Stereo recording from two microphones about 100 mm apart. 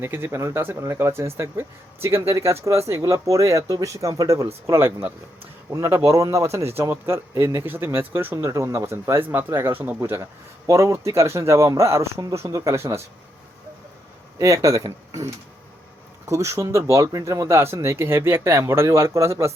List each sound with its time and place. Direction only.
0.0 s speech: 25° right (ahead or behind)
14.3 s speech: 35° right (ahead or behind)
16.3 s speech: 30° right (ahead or behind)